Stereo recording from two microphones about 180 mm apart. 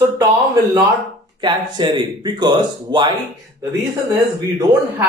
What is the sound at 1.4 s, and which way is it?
Speech, 25° right (ahead or behind).